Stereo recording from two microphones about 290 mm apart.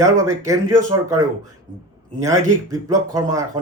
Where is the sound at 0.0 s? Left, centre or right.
Centre.